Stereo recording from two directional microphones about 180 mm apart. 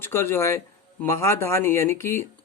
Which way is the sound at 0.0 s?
15° left (ahead or behind).